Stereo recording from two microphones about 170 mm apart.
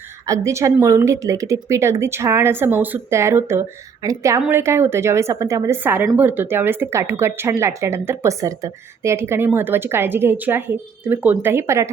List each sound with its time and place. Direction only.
0.3 s speech: 20° right (ahead or behind)